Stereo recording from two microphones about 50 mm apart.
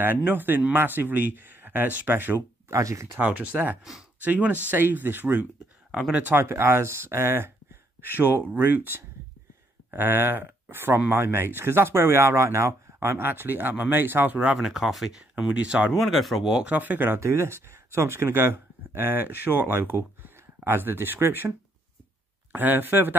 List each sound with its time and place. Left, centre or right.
0.3 s speech: right
2.7 s speech: right
3.2 s speech: right
8.0 s speech: right
13.3 s speech: right
14.6 s speech: centre
15.1 s speech: centre
16.0 s speech: centre
16.6 s speech: right
17.2 s speech: right
22.5 s speech: right